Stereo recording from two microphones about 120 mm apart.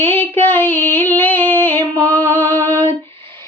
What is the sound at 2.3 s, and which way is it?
Music, 15° left (ahead or behind).